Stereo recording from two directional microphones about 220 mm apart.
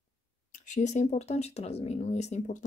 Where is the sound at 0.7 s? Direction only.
30° left (ahead or behind).